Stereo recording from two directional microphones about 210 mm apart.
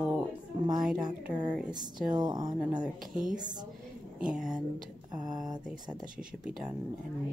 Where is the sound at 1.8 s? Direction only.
20° right (ahead or behind).